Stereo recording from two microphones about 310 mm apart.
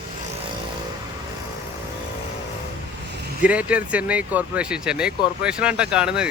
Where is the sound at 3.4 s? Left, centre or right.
Centre.